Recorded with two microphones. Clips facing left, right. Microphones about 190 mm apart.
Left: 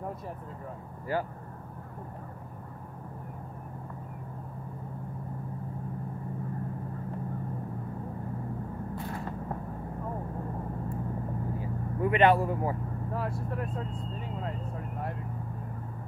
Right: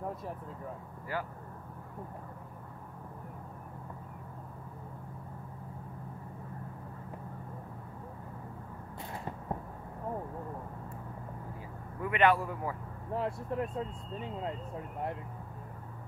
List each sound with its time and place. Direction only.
1.1 s speech: 35° left (ahead or behind)
12.0 s a man's voice: 25° left (ahead or behind)
13.1 s speech: 20° right (ahead or behind)